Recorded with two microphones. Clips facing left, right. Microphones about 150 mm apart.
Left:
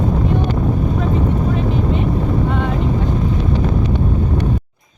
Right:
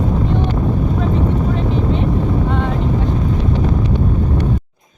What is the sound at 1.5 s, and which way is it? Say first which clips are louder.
Vehicle: even; 5° left (ahead or behind).